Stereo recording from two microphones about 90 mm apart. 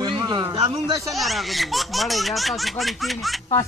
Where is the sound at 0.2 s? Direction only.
45° right (ahead or behind).